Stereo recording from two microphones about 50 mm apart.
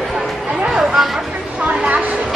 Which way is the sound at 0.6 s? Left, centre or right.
Centre.